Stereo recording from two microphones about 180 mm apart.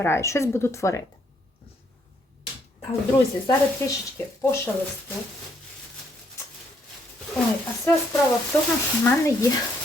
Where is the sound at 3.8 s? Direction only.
15° left (ahead or behind).